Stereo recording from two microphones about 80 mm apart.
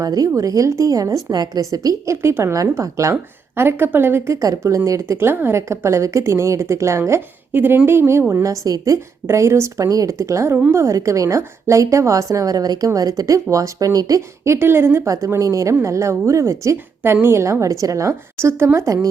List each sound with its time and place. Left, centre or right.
0.0 s a woman's voice: right
2.2 s speech: right
7.5 s a woman's voice: right
8.6 s a woman's voice: right
14.4 s a woman's voice: right
15.0 s speech: right